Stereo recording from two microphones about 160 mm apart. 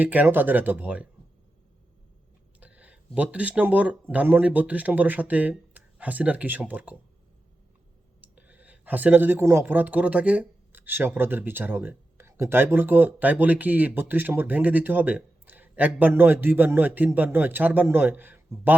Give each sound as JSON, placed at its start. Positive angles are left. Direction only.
{"t": 0.0, "sound": "speech", "side_deg": -10}
{"t": 2.6, "sound": "speech", "side_deg": -10}
{"t": 8.2, "sound": "speech", "side_deg": -10}